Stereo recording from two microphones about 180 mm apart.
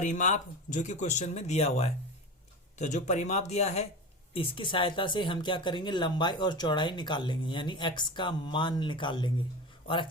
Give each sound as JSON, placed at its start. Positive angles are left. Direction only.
{"t": 0.0, "sound": "speech", "side_deg": 45}